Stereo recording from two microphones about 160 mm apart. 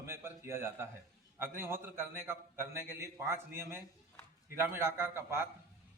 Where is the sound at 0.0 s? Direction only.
15° right (ahead or behind).